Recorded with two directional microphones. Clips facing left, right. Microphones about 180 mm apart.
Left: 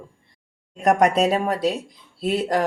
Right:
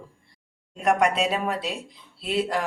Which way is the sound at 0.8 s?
40° left (ahead or behind).